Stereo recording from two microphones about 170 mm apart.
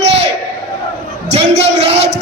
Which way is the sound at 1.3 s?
35° right (ahead or behind).